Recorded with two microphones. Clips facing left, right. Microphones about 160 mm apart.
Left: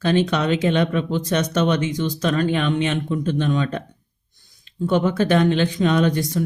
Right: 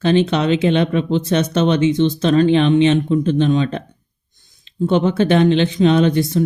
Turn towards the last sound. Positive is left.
turn(degrees=-25)  # may be behind; listen again after turning